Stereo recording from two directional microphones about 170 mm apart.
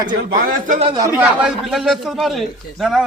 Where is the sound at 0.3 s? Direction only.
55° right (ahead or behind).